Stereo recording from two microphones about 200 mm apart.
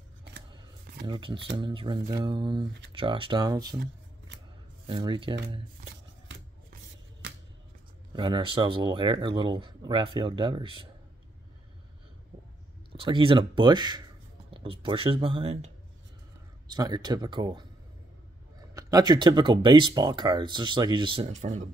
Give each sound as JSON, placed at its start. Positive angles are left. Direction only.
{"t": 1.0, "sound": "speech", "side_deg": -25}
{"t": 4.8, "sound": "speech", "side_deg": -25}
{"t": 8.1, "sound": "speech", "side_deg": -20}
{"t": 12.9, "sound": "speech", "side_deg": -25}
{"t": 16.6, "sound": "speech", "side_deg": -20}
{"t": 18.8, "sound": "speech", "side_deg": -20}